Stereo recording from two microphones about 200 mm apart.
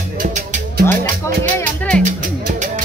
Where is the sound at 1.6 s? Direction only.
5° left (ahead or behind).